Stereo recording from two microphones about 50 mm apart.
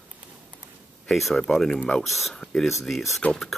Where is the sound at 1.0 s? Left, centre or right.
Centre.